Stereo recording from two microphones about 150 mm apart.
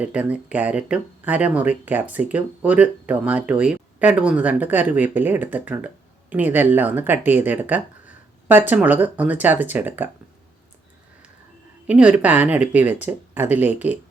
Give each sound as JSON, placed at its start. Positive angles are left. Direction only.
{"t": 0.0, "sound": "speech", "side_deg": -10}
{"t": 11.9, "sound": "speech", "side_deg": -5}